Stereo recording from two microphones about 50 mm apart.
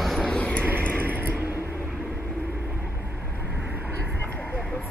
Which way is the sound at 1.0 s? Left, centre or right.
Right.